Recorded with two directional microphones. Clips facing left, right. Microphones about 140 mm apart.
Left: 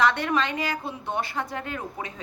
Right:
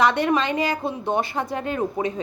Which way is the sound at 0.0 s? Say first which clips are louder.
Right 4 dB; 15° right (ahead or behind).